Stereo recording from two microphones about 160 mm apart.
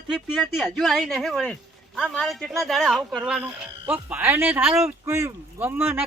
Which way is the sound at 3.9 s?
10° right (ahead or behind).